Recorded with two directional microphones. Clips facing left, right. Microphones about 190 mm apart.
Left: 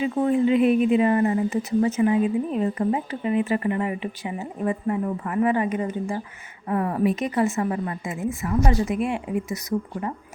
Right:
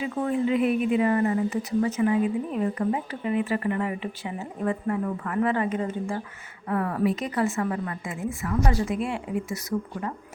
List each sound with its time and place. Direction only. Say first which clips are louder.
0.0 s speech: left 5 dB; 20° left (ahead or behind)